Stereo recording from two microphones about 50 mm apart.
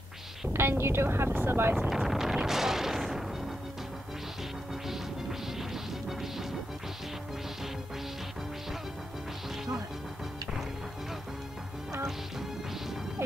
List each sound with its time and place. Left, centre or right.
0.5 s speech: right
1.9 s wind noise: centre
5.6 s smash: centre